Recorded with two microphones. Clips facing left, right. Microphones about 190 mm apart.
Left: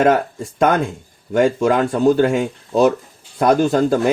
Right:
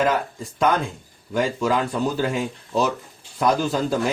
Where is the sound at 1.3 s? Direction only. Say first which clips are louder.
Left 7 dB; 55° left (ahead or behind).